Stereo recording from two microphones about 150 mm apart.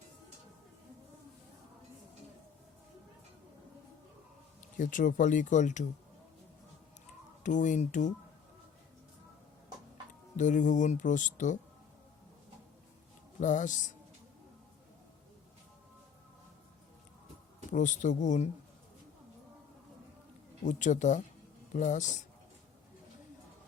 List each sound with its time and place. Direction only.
4.8 s speech: 60° left (ahead or behind)
7.4 s speech: 55° left (ahead or behind)
10.3 s speech: 55° left (ahead or behind)
13.4 s speech: 55° left (ahead or behind)
17.7 s speech: 55° left (ahead or behind)
20.7 s speech: 55° left (ahead or behind)